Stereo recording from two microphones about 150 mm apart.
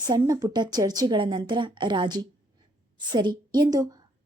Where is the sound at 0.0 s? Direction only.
25° right (ahead or behind).